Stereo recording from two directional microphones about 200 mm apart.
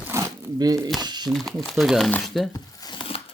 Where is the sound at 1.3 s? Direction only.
Centre (ahead or behind).